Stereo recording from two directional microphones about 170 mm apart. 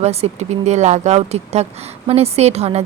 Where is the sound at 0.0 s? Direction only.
40° right (ahead or behind).